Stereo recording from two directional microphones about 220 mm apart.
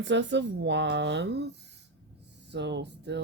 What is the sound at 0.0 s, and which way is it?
Speech, 55° right (ahead or behind).